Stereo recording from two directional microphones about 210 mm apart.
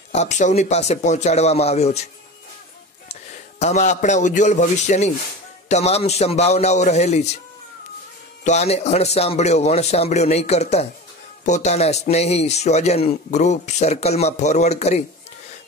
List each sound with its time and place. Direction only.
0.1 s a man's voice: 35° left (ahead or behind)
3.1 s a man's voice: 30° left (ahead or behind)
8.5 s a man's voice: 30° left (ahead or behind)